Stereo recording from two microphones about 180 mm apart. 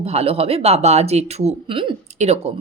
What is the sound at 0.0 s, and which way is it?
Speech, 35° right (ahead or behind).